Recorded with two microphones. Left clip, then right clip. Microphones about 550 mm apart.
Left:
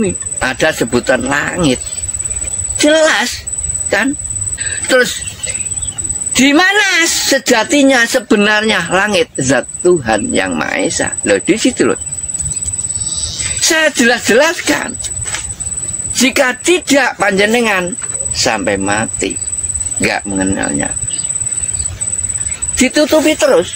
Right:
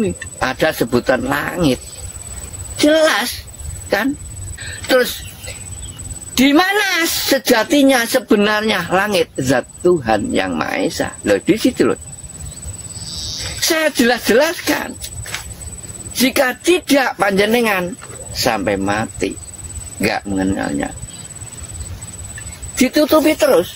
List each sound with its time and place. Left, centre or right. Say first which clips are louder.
0.0 s speech: left 3 dB; right
2.8 s speech: left 3 dB; right
4.8 s speech: left 3 dB; right
6.3 s speech: left 4 dB; right
13.1 s speech: left 1 dB; right
16.2 s speech: left 3 dB; right
22.8 s speech: left 2 dB; right